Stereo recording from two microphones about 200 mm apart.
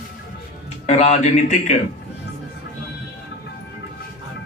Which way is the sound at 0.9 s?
35° left (ahead or behind).